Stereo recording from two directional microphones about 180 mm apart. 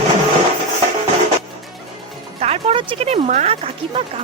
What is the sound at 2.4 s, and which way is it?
Speech, 35° right (ahead or behind).